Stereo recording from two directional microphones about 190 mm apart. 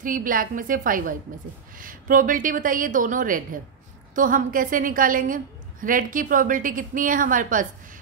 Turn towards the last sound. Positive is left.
turn(degrees=-45)  # may be behind; listen again after turning